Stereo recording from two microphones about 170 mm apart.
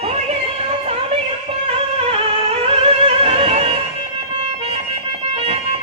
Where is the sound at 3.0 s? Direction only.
35° right (ahead or behind).